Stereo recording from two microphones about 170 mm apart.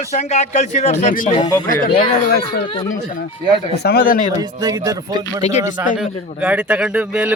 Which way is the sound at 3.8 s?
60° left (ahead or behind).